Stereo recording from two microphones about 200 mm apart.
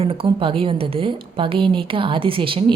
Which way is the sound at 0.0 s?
25° right (ahead or behind).